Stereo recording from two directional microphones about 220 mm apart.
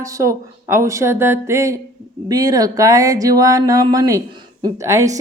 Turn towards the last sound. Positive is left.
turn(degrees=-15)  # may be behind; listen again after turning